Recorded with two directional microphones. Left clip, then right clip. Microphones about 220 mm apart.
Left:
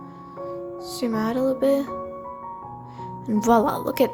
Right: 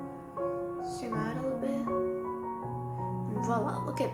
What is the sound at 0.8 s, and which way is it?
Music, 50° left (ahead or behind).